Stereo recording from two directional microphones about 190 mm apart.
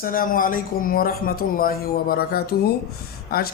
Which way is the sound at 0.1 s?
45° left (ahead or behind).